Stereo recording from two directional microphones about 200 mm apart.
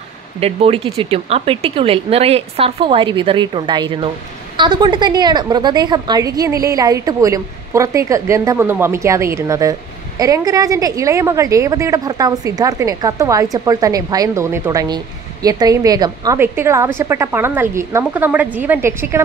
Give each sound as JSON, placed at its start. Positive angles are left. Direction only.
{"t": 0.4, "sound": "a woman's voice", "side_deg": -30}